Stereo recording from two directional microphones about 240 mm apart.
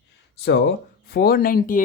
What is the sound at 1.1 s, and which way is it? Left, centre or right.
Speech, left.